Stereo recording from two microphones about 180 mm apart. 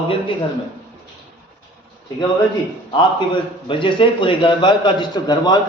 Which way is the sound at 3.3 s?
25° left (ahead or behind).